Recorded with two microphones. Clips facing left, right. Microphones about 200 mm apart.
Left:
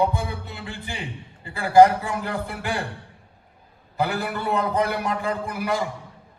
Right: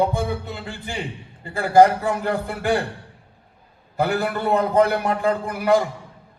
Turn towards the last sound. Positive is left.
turn(degrees=-50)  # may be behind; listen again after turning